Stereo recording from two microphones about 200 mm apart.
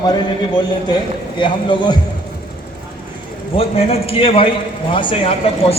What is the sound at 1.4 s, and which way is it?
Speech, 25° left (ahead or behind).